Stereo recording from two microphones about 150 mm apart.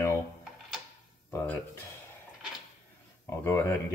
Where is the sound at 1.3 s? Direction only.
10° left (ahead or behind).